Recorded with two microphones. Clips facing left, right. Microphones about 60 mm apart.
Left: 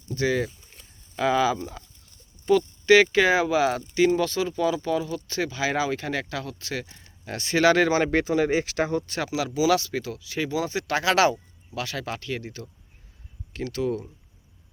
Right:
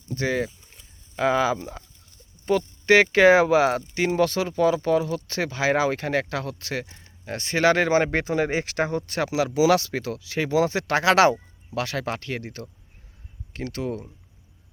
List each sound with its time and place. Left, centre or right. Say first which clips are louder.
0.1 s speech: left 1 dB; right
6.8 s speech: right 2 dB; right
13.5 s speech: left 2 dB; right